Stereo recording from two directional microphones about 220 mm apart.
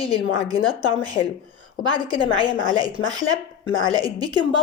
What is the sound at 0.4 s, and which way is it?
Speech, 20° right (ahead or behind).